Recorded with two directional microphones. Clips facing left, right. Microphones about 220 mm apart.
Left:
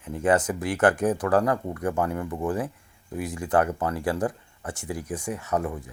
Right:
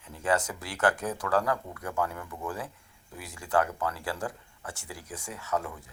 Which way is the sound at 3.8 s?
50° left (ahead or behind).